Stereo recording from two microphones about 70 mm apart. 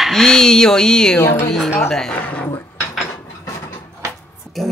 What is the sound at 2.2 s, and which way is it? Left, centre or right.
Speech, left.